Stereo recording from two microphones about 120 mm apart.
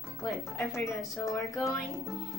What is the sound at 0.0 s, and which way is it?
Speech, 25° left (ahead or behind).